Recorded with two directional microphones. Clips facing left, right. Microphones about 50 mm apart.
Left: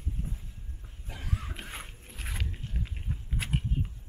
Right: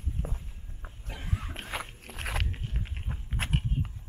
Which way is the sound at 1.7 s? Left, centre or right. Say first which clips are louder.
Right 6 dB; right.